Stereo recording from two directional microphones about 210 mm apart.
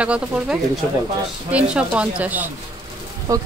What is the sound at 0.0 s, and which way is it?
Speech, 5° right (ahead or behind).